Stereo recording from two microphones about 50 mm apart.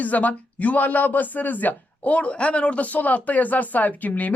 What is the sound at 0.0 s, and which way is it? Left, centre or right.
Speech, left.